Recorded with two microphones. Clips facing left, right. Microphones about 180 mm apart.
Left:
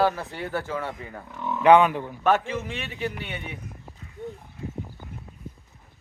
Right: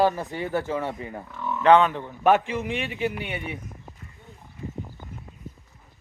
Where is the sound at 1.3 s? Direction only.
10° left (ahead or behind).